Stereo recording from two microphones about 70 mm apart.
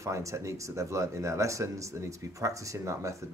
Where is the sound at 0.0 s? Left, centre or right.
Right.